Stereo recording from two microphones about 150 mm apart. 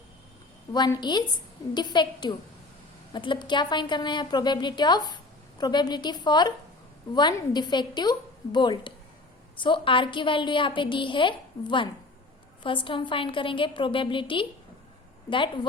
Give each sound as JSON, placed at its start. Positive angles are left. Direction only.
{"t": 0.7, "sound": "a woman's voice", "side_deg": 30}